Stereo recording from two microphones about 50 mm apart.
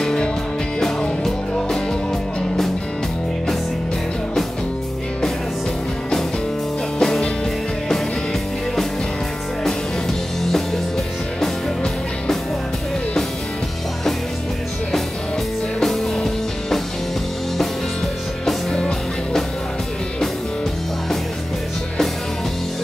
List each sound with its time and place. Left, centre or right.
0.0 s music: centre
7.0 s music: centre
11.4 s music: centre
15.8 s music: centre
18.7 s music: centre